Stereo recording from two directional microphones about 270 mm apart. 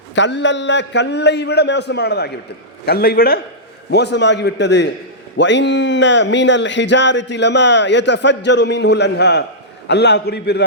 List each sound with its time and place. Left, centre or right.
0.2 s speech: left